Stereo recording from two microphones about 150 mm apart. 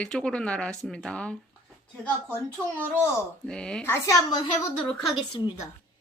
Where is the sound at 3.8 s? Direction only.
15° left (ahead or behind).